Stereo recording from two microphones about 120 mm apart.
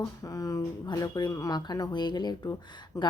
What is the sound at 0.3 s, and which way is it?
Speech, 30° left (ahead or behind).